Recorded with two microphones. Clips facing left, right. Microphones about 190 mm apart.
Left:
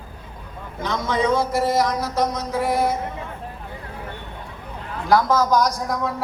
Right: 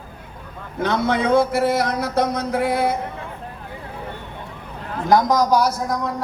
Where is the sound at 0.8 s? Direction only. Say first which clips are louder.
Right 3 dB; 60° right (ahead or behind).